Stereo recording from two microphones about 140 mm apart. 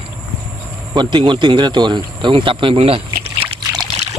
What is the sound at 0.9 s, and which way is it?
Speech, 35° right (ahead or behind).